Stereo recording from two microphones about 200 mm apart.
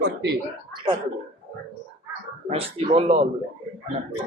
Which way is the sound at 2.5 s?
30° right (ahead or behind).